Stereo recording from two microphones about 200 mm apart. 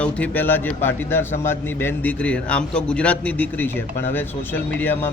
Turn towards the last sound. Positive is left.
turn(degrees=10)  # may be behind; listen again after turning